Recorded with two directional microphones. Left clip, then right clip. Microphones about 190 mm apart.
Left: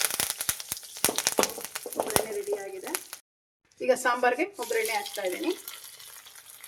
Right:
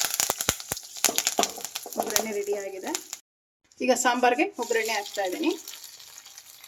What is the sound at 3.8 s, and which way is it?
Speech, 50° right (ahead or behind).